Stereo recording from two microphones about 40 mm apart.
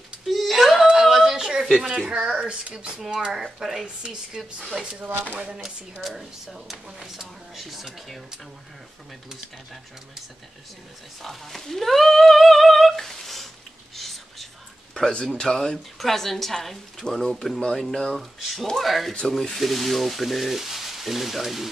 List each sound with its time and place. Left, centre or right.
0.3 s whimper: centre
0.8 s a sound: centre
1.8 s a woman's voice: centre
2.0 s a woman's voice: right
6.0 s speech: centre
11.2 s humming: centre
13.9 s whispering: centre
15.1 s speech: centre
17.1 s speech: centre